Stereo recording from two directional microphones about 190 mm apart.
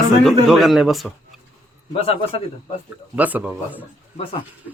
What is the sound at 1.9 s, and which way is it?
Speech, 30° left (ahead or behind).